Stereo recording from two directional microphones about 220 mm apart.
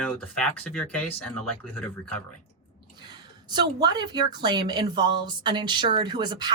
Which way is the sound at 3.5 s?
20° right (ahead or behind).